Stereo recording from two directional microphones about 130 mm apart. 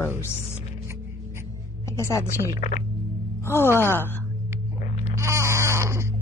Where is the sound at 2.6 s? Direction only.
80° left.